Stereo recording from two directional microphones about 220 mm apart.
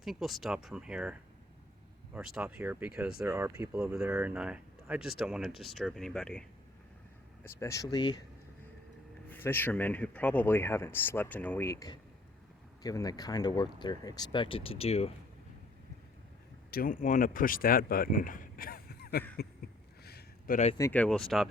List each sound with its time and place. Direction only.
0.0 s speech: centre (ahead or behind)
2.1 s speech: 5° right (ahead or behind)
7.4 s speech: 15° left (ahead or behind)
9.3 s speech: 10° left (ahead or behind); by 15.1 s 25° left (ahead or behind)
16.7 s speech: 40° left (ahead or behind)
20.1 s a sound: 45° left (ahead or behind)
20.7 s speech: 10° left (ahead or behind)